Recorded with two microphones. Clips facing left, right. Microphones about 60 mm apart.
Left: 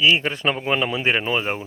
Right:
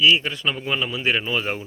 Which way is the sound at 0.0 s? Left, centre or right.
Left.